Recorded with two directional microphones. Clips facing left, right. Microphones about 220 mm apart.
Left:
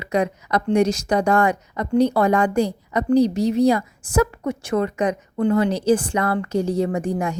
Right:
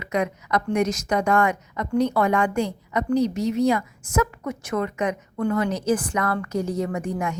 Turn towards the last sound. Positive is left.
turn(degrees=30)  # may be behind; listen again after turning